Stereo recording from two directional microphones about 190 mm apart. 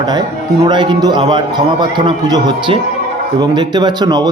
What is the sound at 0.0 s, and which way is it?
Speech, 20° right (ahead or behind).